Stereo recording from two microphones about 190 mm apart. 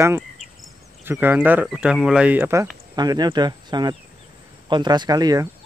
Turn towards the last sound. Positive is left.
turn(degrees=-20)  # may be behind; listen again after turning